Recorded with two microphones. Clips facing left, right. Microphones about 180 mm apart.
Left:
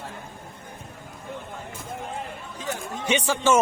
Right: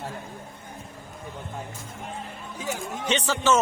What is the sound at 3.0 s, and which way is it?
Speech, 10° left (ahead or behind).